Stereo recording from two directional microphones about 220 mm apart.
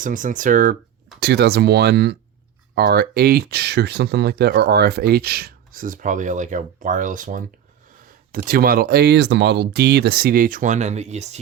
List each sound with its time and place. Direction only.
0.0 s speech: 35° right (ahead or behind)
1.2 s speech: 50° right (ahead or behind); by 11.3 s 30° right (ahead or behind)